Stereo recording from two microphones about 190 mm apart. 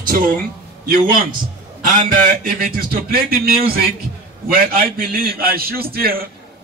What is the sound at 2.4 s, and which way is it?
A man's voice, 50° right (ahead or behind).